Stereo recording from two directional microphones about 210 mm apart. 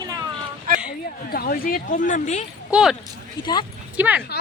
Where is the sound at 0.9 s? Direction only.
45° left (ahead or behind).